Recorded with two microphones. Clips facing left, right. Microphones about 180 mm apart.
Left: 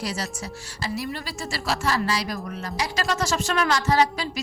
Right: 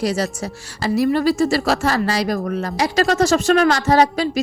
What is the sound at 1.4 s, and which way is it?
Speech, 55° right (ahead or behind).